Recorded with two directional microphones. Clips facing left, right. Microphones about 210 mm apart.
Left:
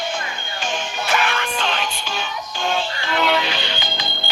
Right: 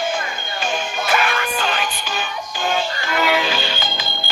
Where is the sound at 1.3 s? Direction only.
5° right (ahead or behind).